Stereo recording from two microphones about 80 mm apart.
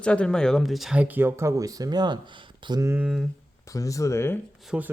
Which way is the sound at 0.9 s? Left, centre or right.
Right.